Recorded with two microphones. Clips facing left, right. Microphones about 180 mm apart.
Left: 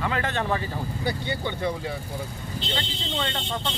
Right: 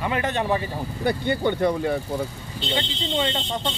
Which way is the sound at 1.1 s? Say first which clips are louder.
Right 8 dB; 55° right (ahead or behind).